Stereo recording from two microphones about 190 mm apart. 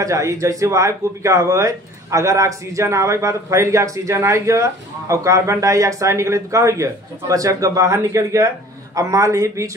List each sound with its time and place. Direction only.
0.0 s speech: 15° right (ahead or behind)